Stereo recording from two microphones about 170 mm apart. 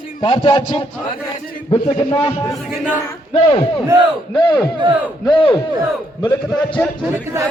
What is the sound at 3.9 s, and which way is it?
Battle cry, 15° right (ahead or behind).